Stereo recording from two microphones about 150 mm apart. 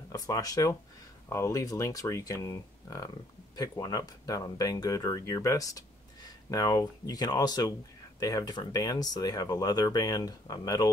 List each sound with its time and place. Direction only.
0.1 s speech: 25° left (ahead or behind)